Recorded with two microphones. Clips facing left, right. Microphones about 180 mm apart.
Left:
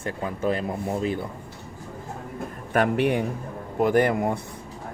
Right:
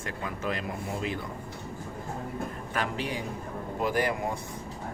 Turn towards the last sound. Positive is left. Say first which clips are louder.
# left 7 dB
turn(degrees=55)  # may be behind; listen again after turning